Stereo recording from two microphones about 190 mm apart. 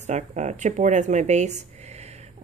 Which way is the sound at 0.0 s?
40° right (ahead or behind).